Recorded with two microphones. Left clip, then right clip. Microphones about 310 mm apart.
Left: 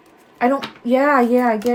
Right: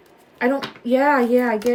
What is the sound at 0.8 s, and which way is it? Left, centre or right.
Speech, centre.